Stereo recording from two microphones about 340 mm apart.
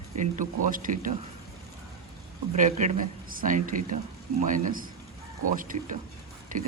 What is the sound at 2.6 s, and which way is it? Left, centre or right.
A man's voice, right.